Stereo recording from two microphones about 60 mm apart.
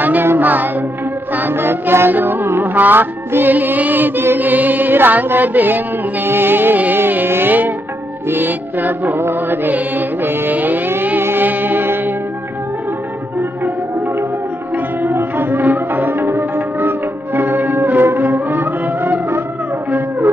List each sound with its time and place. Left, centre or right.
0.0 s music: right
15.1 s music: right